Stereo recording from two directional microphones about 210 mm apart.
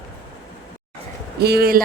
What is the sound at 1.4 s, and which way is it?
Speech, 50° right (ahead or behind).